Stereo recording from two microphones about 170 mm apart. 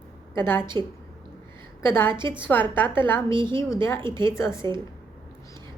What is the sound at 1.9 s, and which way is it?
A woman's voice, 15° left (ahead or behind).